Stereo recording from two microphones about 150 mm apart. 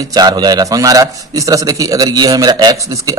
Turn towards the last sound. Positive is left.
turn(degrees=-20)  # may be behind; listen again after turning